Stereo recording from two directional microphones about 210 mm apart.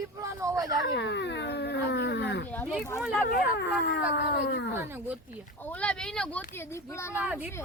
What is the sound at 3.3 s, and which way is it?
Cat, 55° left (ahead or behind).